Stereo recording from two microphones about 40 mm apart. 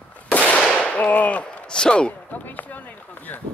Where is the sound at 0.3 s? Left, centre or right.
Left.